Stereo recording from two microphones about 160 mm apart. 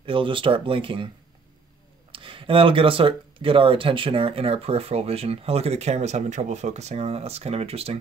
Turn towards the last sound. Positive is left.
turn(degrees=-40)  # may be behind; listen again after turning